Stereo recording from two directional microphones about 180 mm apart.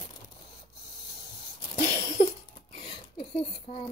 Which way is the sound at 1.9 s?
15° left (ahead or behind).